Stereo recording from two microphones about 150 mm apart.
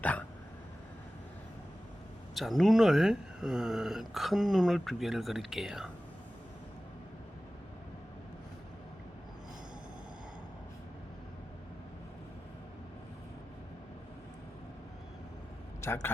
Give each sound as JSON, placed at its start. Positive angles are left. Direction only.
{"t": 0.0, "sound": "a sound", "side_deg": 10}
{"t": 2.3, "sound": "speech", "side_deg": 0}
{"t": 15.8, "sound": "speech", "side_deg": 20}